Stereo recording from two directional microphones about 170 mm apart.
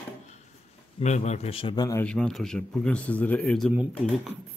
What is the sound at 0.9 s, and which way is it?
Speech, 40° left (ahead or behind).